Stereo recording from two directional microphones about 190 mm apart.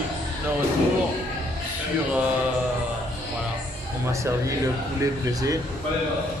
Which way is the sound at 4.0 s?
15° right (ahead or behind).